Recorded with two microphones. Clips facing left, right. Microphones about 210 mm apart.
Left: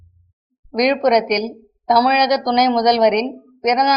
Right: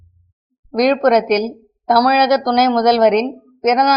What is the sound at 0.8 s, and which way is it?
Speech, centre (ahead or behind).